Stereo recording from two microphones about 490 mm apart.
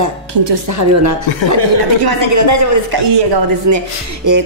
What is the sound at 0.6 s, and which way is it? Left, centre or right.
Speech, right.